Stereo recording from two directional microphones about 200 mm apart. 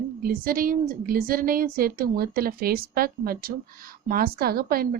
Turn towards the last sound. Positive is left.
turn(degrees=-50)  # may be behind; listen again after turning